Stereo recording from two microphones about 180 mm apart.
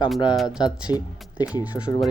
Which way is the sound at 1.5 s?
10° right (ahead or behind).